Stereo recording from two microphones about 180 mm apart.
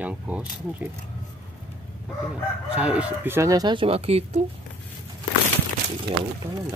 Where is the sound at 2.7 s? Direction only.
5° right (ahead or behind); by 4.4 s 35° right (ahead or behind).